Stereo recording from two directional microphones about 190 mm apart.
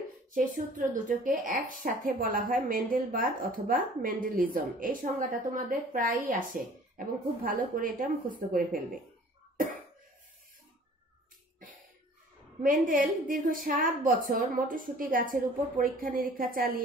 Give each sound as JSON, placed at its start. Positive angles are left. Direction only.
{"t": 0.3, "sound": "a woman's voice", "side_deg": -45}
{"t": 12.6, "sound": "a woman's voice", "side_deg": -45}